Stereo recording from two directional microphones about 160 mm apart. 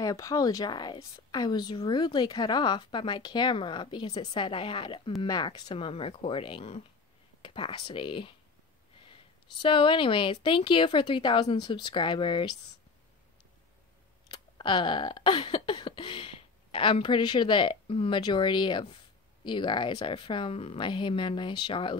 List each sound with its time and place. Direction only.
0.0 s a woman's voice: 20° left (ahead or behind)
14.3 s speech: 30° left (ahead or behind)